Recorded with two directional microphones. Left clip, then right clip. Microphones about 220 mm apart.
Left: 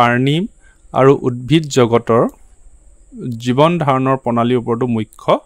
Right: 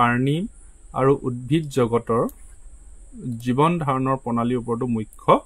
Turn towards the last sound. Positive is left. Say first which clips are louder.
# left 3 dB
turn(degrees=45)  # may be behind; listen again after turning